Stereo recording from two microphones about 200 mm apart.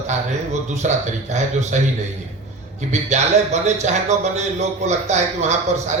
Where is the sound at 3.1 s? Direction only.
35° right (ahead or behind).